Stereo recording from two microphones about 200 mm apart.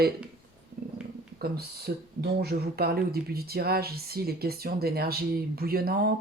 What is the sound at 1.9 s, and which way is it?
Speech, 50° right (ahead or behind).